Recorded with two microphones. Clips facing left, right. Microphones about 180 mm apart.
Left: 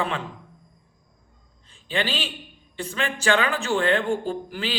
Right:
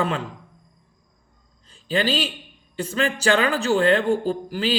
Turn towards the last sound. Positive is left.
turn(degrees=-40)  # may be behind; listen again after turning